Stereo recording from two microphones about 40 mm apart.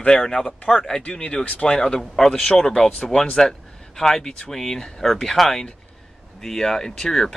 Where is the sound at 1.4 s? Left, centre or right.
Left.